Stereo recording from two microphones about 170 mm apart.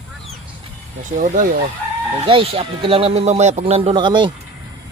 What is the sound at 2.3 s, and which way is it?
Speech, 30° right (ahead or behind).